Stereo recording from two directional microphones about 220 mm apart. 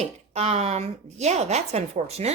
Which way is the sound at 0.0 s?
30° right (ahead or behind).